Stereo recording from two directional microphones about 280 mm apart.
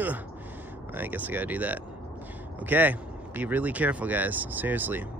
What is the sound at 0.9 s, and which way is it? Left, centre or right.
Speech, centre.